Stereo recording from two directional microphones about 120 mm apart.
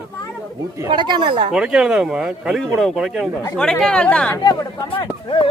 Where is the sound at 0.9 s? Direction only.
40° right (ahead or behind).